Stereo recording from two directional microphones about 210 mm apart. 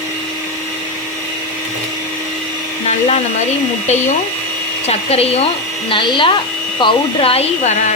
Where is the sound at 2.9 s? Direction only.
30° left (ahead or behind).